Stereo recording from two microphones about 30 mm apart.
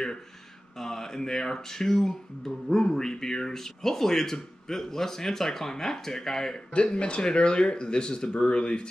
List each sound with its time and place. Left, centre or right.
0.7 s speech: centre
6.7 s speech: left